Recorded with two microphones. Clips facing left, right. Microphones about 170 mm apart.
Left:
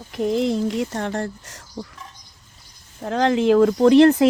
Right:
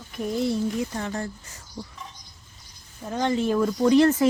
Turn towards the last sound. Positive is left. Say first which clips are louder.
# left 5 dB
turn(degrees=70)  # may be behind; listen again after turning